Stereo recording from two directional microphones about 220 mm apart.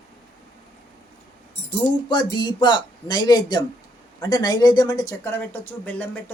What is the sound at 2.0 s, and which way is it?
Speech, 20° left (ahead or behind).